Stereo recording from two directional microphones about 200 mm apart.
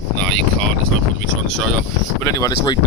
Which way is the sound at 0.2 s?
5° left (ahead or behind).